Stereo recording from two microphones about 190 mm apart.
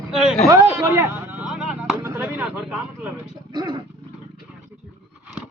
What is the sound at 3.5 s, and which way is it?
Wild animals, 25° right (ahead or behind).